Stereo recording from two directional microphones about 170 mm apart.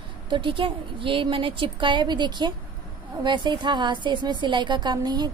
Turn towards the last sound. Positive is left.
turn(degrees=-25)  # may be behind; listen again after turning